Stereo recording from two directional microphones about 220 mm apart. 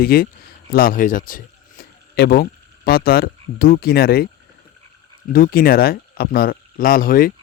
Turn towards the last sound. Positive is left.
turn(degrees=40)  # may be behind; listen again after turning